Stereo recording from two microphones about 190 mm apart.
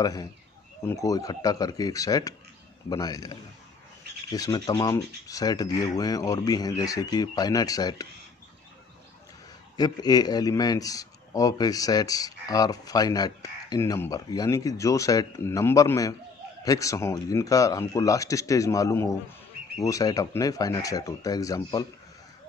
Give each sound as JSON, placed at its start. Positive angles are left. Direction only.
{"t": 0.0, "sound": "speech", "side_deg": 20}
{"t": 9.8, "sound": "speech", "side_deg": 20}